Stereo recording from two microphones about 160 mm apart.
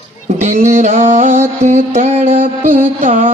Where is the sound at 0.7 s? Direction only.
50° right (ahead or behind).